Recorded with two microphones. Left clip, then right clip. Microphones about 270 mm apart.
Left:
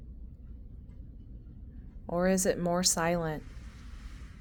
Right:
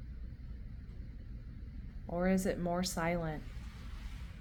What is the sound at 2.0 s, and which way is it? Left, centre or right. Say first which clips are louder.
A woman's voice: left 6 dB; left.